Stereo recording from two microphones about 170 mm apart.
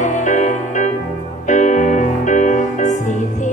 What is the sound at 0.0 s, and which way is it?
Music, 45° left (ahead or behind).